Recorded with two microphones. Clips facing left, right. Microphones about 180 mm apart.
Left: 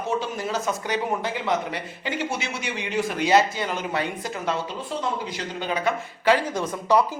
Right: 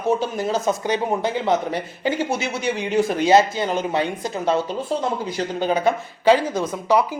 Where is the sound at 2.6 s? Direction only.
35° right (ahead or behind).